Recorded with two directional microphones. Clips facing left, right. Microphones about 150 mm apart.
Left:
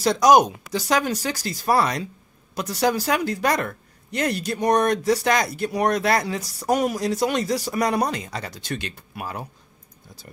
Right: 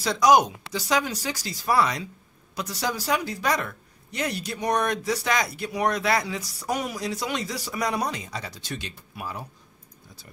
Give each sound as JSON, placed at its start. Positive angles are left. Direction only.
{"t": 0.0, "sound": "speech", "side_deg": 45}